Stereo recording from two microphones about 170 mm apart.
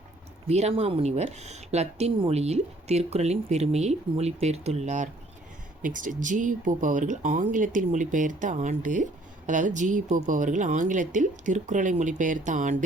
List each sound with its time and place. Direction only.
0.4 s speech: 40° right (ahead or behind)